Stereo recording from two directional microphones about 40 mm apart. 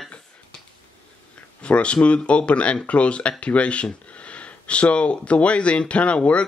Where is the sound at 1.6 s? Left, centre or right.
Left.